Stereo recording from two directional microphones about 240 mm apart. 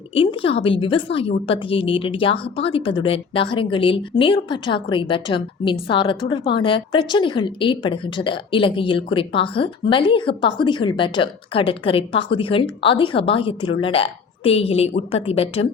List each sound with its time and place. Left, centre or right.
0.1 s a woman's voice: left